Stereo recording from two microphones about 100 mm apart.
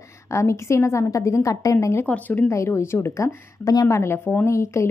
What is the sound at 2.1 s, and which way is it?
Speech, 15° left (ahead or behind).